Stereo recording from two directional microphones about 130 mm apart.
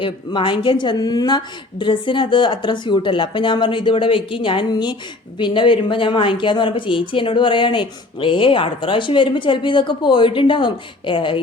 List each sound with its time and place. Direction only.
0.0 s a woman's voice: 40° left (ahead or behind)